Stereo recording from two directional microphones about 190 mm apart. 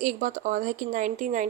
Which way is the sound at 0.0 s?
40° right (ahead or behind).